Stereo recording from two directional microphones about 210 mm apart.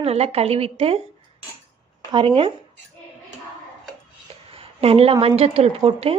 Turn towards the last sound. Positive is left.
turn(degrees=-30)  # may be behind; listen again after turning